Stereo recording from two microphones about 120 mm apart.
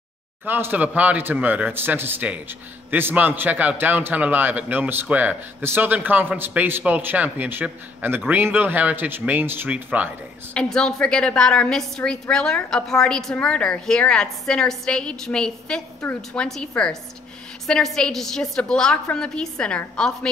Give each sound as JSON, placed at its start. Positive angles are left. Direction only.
{"t": 0.5, "sound": "a man's voice", "side_deg": -15}
{"t": 10.5, "sound": "a woman's voice", "side_deg": 5}